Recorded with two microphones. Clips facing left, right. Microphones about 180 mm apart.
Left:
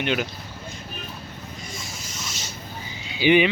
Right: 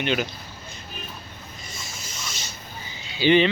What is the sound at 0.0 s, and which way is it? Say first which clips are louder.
Speech: even; 10° left (ahead or behind).